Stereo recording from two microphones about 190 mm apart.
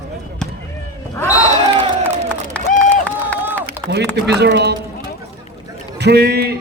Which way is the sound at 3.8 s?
65° right (ahead or behind).